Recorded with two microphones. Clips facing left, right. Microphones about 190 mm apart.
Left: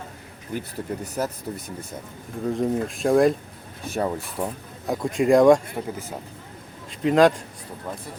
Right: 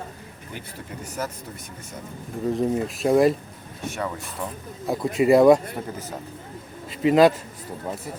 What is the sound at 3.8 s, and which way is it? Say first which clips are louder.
Speech: left 4 dB; 35° left (ahead or behind).